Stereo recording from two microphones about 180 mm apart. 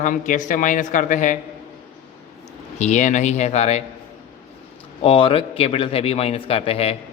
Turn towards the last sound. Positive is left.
turn(degrees=35)  # may be behind; listen again after turning